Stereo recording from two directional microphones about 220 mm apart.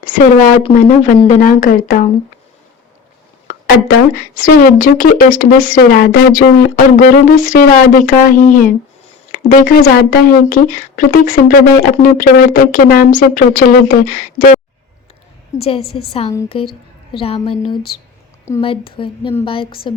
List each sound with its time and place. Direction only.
0.0 s speech: 35° left (ahead or behind)
4.4 s speech: 40° left (ahead or behind)
15.5 s speech: 25° left (ahead or behind)